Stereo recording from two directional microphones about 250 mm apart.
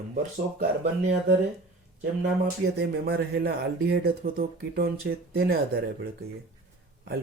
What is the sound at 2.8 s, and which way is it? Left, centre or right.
Speech, right.